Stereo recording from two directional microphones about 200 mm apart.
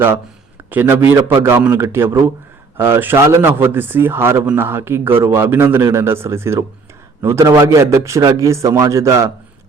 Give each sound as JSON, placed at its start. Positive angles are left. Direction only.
{"t": 0.7, "sound": "speech", "side_deg": -10}